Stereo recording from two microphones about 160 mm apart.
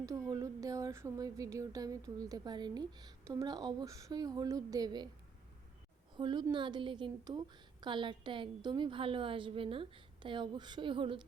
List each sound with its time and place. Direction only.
0.0 s speech: 20° right (ahead or behind)
6.1 s a woman's voice: 30° right (ahead or behind)